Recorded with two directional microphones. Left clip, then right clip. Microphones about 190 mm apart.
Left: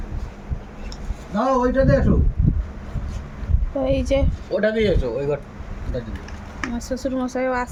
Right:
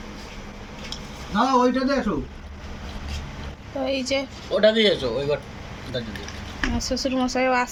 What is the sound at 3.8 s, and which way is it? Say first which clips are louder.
Speech: left 4 dB; 35° left (ahead or behind).